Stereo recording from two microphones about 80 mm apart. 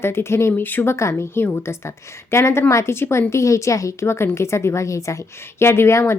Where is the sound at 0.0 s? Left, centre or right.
Left.